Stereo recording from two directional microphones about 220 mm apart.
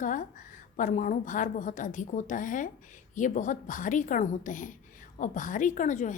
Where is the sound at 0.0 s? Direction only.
35° left (ahead or behind).